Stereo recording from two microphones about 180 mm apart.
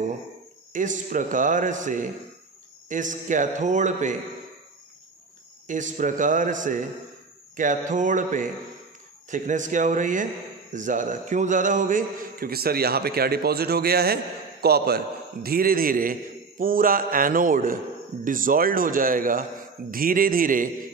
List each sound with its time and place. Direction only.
0.7 s a man's voice: 45° right (ahead or behind)
5.7 s a man's voice: 45° right (ahead or behind)